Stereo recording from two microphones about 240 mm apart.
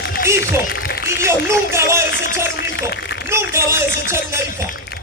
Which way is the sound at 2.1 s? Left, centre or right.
Left.